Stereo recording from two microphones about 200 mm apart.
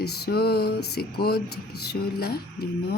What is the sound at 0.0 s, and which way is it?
Music, 55° left (ahead or behind).